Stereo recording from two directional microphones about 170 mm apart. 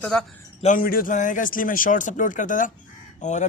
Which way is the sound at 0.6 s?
50° left (ahead or behind).